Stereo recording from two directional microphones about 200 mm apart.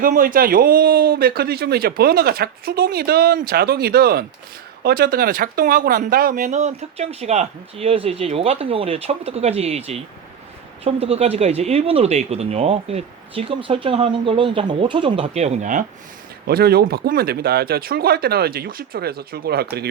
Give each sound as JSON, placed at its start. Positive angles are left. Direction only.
{"t": 0.0, "sound": "speech", "side_deg": -45}
{"t": 16.5, "sound": "speech", "side_deg": -50}